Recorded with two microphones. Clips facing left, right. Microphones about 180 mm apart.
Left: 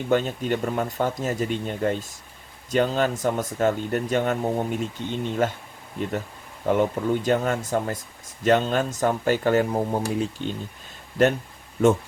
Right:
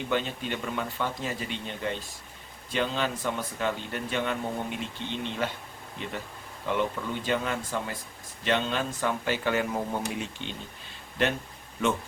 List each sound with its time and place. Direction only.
0.1 s speech: 45° left (ahead or behind)